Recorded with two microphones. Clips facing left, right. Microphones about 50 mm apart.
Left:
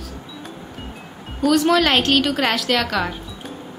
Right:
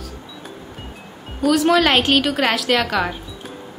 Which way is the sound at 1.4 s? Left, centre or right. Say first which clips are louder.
Right 1 dB; centre.